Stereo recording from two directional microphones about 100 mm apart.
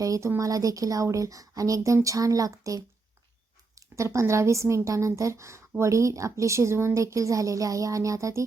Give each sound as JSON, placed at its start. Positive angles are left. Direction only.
{"t": 0.0, "sound": "a woman's voice", "side_deg": -30}